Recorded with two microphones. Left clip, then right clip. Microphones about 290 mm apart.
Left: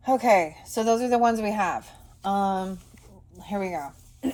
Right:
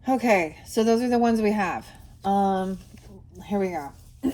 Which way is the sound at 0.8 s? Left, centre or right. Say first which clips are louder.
Even; centre.